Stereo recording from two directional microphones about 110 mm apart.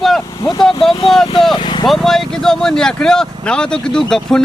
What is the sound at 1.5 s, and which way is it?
Vehicle, 45° left (ahead or behind).